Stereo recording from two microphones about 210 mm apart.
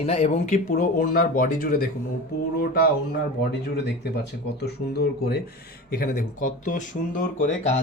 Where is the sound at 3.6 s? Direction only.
50° left (ahead or behind).